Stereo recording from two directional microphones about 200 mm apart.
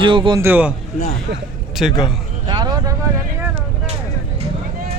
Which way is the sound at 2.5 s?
20° right (ahead or behind).